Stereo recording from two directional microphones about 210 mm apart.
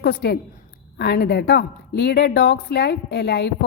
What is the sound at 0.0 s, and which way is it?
A woman's voice, 50° left (ahead or behind).